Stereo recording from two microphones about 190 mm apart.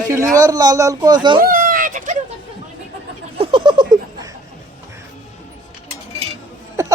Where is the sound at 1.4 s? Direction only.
50° right (ahead or behind).